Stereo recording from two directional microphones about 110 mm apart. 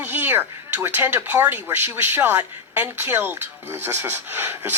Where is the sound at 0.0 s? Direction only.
20° right (ahead or behind).